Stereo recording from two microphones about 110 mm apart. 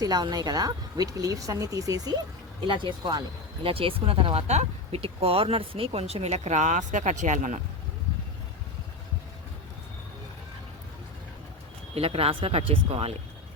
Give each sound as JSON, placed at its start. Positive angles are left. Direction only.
{"t": 0.0, "sound": "speech", "side_deg": -40}
{"t": 2.6, "sound": "speech", "side_deg": -45}
{"t": 4.4, "sound": "speech", "side_deg": -75}
{"t": 11.9, "sound": "speech", "side_deg": -60}